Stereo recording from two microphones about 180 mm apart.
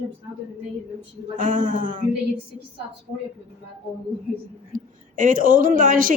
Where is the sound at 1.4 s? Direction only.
50° right (ahead or behind).